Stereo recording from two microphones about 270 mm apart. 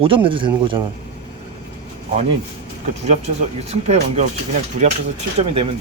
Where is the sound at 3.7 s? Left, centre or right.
Right.